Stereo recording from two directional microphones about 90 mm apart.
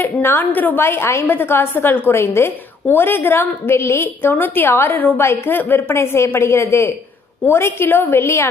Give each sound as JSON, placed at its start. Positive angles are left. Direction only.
{"t": 0.0, "sound": "a woman's voice", "side_deg": 20}